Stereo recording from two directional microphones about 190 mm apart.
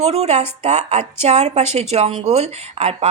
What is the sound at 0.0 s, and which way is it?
Speech, 35° right (ahead or behind).